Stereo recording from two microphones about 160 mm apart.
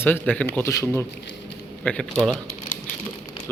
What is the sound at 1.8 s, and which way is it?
Speech, 10° left (ahead or behind).